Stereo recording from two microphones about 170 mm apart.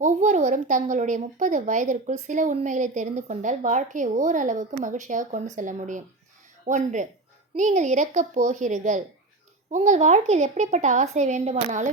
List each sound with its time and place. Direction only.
0.0 s a woman's voice: 45° right (ahead or behind)